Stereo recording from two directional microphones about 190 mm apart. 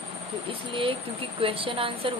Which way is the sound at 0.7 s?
30° right (ahead or behind).